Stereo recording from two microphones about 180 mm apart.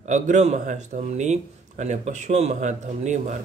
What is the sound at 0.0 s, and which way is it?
Speech, 40° right (ahead or behind).